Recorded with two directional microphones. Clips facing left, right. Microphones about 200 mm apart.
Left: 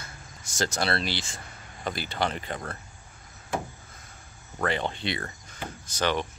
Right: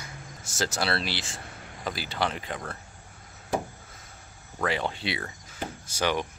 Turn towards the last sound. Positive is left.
turn(degrees=-10)  # may be behind; listen again after turning